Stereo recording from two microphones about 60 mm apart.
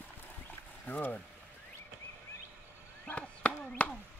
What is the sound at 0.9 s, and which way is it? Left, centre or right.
Speech, left.